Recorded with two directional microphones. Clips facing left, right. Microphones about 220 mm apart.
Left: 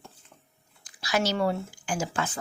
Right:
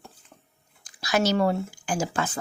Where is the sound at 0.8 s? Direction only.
45° right (ahead or behind).